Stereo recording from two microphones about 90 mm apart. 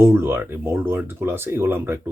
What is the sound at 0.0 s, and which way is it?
Speech, 25° right (ahead or behind).